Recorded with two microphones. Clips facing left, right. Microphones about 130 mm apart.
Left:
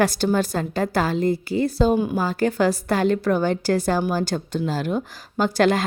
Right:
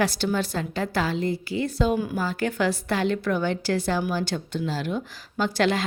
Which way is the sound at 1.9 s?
25° left (ahead or behind).